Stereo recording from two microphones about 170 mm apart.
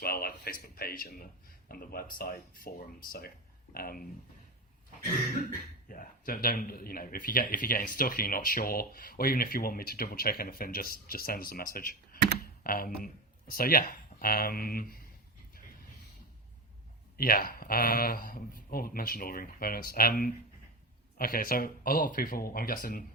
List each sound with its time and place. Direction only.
0.0 s speech: 60° left (ahead or behind)
5.9 s speech: 55° left (ahead or behind)
17.2 s speech: 60° left (ahead or behind)